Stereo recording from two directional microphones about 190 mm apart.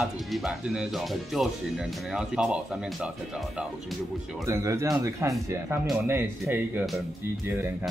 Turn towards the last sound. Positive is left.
turn(degrees=-10)  # may be behind; listen again after turning